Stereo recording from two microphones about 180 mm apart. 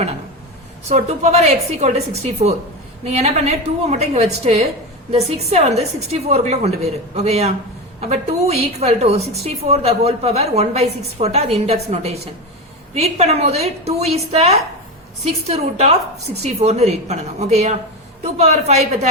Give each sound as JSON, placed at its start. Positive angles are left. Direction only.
{"t": 0.9, "sound": "a woman's voice", "side_deg": -40}